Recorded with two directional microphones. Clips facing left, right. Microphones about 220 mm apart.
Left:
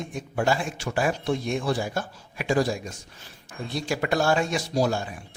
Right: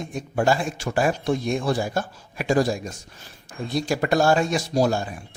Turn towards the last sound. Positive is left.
turn(degrees=-40)  # may be behind; listen again after turning